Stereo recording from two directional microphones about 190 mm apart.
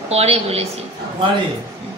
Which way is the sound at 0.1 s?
35° right (ahead or behind).